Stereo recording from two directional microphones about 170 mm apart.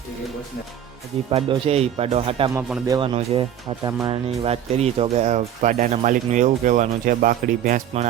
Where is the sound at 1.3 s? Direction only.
35° right (ahead or behind).